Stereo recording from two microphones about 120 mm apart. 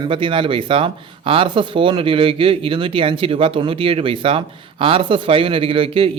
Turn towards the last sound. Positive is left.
turn(degrees=-50)  # may be behind; listen again after turning